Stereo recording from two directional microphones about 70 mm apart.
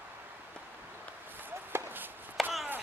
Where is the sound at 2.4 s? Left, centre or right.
Centre.